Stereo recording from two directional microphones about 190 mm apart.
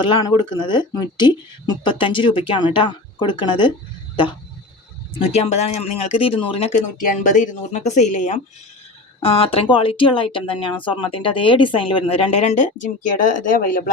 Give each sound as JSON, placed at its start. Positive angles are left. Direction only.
{"t": 0.0, "sound": "speech", "side_deg": 25}
{"t": 5.2, "sound": "speech", "side_deg": 35}